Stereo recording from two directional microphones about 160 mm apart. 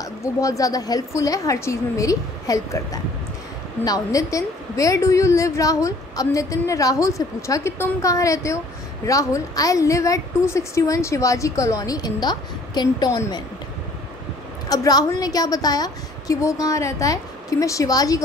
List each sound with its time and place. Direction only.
0.0 s a woman's voice: 20° left (ahead or behind)
14.7 s a woman's voice: 25° left (ahead or behind)